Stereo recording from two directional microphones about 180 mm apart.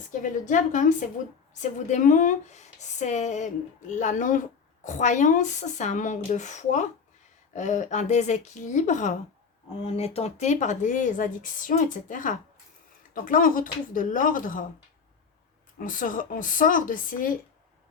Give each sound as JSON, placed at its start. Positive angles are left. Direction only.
{"t": 0.1, "sound": "speech", "side_deg": 45}
{"t": 15.8, "sound": "speech", "side_deg": 50}